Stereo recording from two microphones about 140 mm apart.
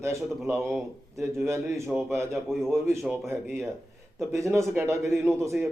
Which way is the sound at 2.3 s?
Centre (ahead or behind).